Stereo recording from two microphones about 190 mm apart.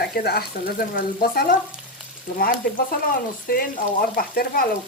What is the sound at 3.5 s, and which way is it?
Speech, 50° left (ahead or behind).